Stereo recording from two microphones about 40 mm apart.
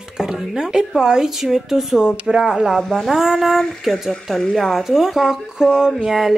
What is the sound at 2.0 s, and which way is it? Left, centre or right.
Speech, right.